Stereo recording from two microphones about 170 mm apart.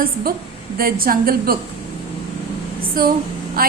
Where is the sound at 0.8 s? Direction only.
60° right (ahead or behind).